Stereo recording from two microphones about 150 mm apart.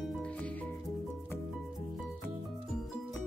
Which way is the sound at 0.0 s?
5° left (ahead or behind).